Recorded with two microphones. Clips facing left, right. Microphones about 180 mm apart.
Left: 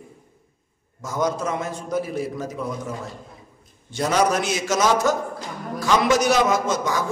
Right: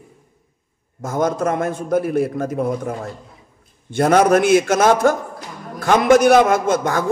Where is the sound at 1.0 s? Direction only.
55° right (ahead or behind).